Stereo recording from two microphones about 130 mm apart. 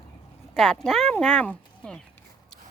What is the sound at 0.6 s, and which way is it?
Speech, 5° left (ahead or behind).